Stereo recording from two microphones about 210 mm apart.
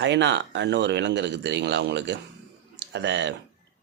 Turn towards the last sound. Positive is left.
turn(degrees=-55)  # may be behind; listen again after turning